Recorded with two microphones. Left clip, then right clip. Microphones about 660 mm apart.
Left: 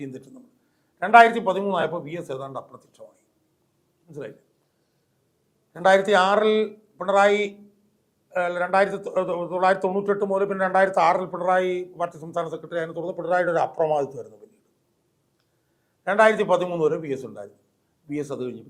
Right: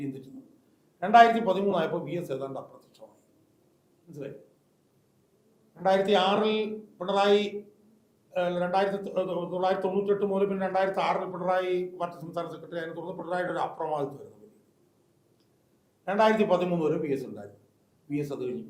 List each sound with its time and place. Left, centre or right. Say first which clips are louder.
0.9 s speech: left 4 dB; left
4.1 s speech: left 6 dB; left
5.8 s speech: left 6 dB; left
8.4 s speech: left 5 dB; left
16.0 s speech: left 5 dB; left